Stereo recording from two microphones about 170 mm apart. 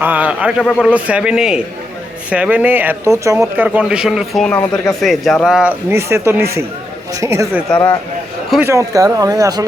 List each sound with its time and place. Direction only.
0.0 s a man's voice: 10° right (ahead or behind)
8.6 s speech: 20° right (ahead or behind)